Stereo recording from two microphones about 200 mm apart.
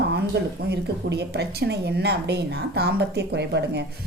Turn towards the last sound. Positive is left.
turn(degrees=-60)  # may be behind; listen again after turning